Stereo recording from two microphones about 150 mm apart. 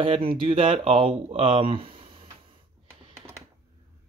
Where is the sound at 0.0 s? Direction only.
35° right (ahead or behind).